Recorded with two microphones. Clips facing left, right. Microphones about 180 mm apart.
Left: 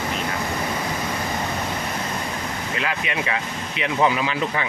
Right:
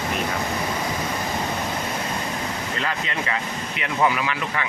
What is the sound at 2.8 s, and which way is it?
Speech, 15° left (ahead or behind).